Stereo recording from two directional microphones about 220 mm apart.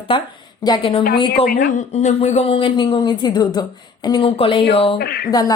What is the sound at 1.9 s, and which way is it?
Speech, 30° left (ahead or behind).